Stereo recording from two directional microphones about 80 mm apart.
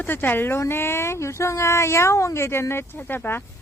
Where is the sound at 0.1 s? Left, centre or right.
Left.